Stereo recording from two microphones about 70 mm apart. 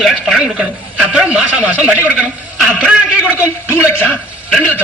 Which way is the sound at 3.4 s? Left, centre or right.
Left.